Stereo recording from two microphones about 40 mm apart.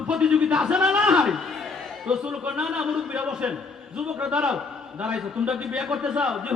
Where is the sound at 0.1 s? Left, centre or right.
Centre.